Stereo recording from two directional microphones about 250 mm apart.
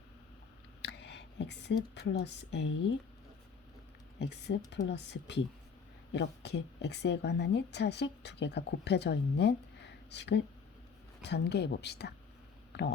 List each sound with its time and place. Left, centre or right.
0.8 s a woman's voice: left
4.2 s speech: left
12.7 s a sound: left